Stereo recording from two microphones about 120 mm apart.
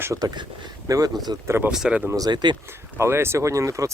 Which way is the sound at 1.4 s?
20° right (ahead or behind).